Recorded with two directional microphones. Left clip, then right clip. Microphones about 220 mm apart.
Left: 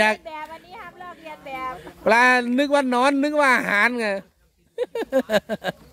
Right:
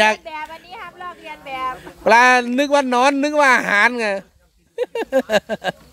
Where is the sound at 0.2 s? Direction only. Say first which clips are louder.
Right 4 dB; 25° right (ahead or behind).